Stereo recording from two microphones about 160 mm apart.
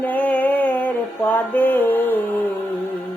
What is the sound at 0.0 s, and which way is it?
Music, 10° left (ahead or behind).